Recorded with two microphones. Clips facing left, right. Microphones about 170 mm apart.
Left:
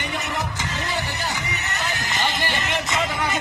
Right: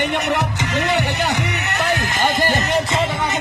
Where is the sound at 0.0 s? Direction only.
70° right (ahead or behind); by 2.8 s 45° right (ahead or behind).